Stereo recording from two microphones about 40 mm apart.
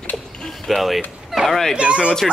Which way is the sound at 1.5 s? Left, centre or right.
Centre.